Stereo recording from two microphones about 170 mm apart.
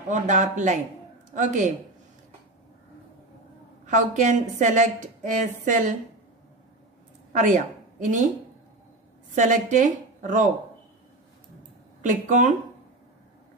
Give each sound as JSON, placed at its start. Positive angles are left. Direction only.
{"t": 0.1, "sound": "a woman's voice", "side_deg": -45}
{"t": 3.8, "sound": "a woman's voice", "side_deg": -45}
{"t": 7.3, "sound": "a woman's voice", "side_deg": -45}
{"t": 9.3, "sound": "a woman's voice", "side_deg": -50}
{"t": 12.0, "sound": "a woman's voice", "side_deg": -50}